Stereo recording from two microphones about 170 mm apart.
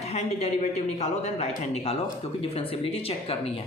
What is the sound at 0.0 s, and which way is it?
A woman's voice, 40° left (ahead or behind).